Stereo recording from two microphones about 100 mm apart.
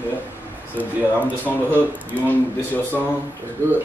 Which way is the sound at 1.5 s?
20° left (ahead or behind).